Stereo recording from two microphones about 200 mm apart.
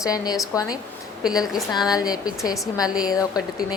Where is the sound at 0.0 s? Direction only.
15° left (ahead or behind).